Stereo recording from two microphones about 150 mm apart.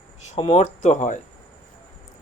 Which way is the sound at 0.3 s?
45° left (ahead or behind).